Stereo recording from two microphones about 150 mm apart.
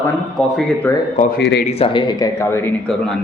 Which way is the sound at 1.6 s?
40° left (ahead or behind).